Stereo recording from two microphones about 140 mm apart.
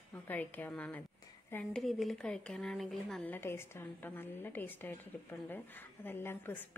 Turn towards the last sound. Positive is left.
turn(degrees=15)  # may be behind; listen again after turning